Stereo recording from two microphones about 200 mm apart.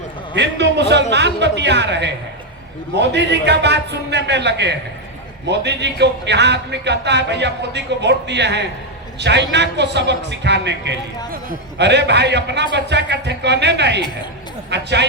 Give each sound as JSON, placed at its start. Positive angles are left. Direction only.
{"t": 0.3, "sound": "speech", "side_deg": -60}